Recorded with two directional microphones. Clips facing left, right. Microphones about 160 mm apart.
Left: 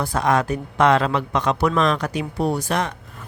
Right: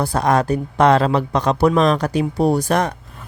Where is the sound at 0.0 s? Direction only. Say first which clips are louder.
Right 3 dB; 35° right (ahead or behind).